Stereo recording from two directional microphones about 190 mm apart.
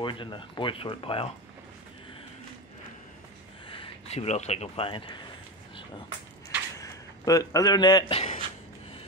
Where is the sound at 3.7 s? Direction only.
30° left (ahead or behind).